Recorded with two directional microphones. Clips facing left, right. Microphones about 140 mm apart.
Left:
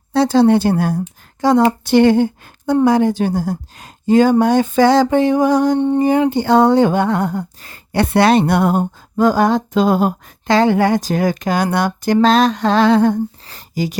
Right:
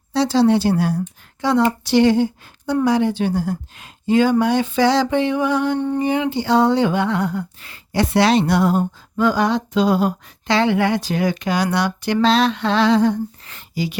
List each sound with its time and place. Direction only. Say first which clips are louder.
0.1 s a woman's voice: left 4 dB; 50° left (ahead or behind)
7.9 s speech: left 3 dB; 55° left (ahead or behind)
13.4 s speech: left 3 dB; 35° left (ahead or behind)